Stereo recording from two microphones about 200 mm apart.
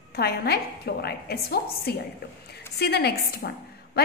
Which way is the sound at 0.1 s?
50° left (ahead or behind).